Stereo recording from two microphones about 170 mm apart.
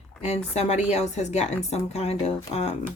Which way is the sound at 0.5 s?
40° left (ahead or behind).